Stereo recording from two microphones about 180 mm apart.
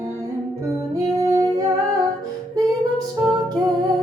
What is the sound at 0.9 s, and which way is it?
Singing, 20° right (ahead or behind).